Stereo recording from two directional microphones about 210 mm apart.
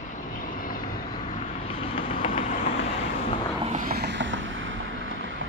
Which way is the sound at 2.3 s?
40° left (ahead or behind).